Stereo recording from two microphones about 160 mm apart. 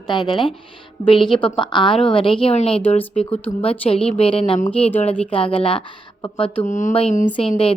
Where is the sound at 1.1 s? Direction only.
30° left (ahead or behind).